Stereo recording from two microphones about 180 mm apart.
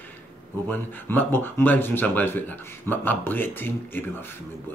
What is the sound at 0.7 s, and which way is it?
Speech, 10° left (ahead or behind).